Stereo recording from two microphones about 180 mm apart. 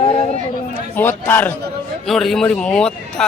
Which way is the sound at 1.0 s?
10° left (ahead or behind).